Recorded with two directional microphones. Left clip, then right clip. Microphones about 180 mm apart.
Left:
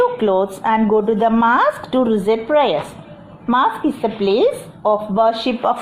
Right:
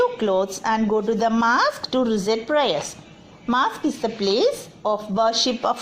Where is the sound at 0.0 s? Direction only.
35° right (ahead or behind).